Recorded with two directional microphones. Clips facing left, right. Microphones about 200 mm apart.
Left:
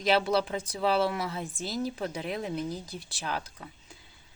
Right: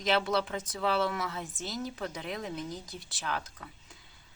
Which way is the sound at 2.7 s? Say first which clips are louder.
Left 3 dB; 10° left (ahead or behind).